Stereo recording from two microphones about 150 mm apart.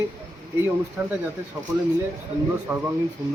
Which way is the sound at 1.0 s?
10° right (ahead or behind).